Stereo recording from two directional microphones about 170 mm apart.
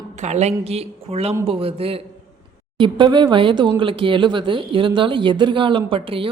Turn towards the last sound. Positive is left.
turn(degrees=-30)  # may be behind; listen again after turning